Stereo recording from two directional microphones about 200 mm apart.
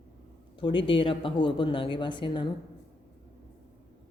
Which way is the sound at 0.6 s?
25° left (ahead or behind).